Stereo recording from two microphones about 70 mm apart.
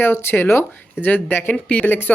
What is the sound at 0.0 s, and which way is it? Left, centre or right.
Speech, left.